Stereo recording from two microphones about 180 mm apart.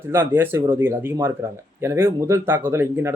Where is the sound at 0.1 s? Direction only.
10° right (ahead or behind).